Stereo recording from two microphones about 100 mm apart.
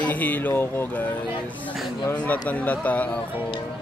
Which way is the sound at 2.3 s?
15° left (ahead or behind).